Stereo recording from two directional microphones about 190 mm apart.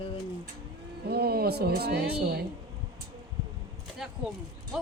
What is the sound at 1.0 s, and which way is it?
Speech, 55° right (ahead or behind).